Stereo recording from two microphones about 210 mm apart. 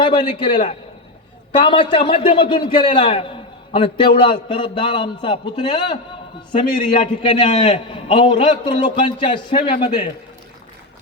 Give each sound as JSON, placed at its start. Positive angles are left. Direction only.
{"t": 0.0, "sound": "a man's voice", "side_deg": 25}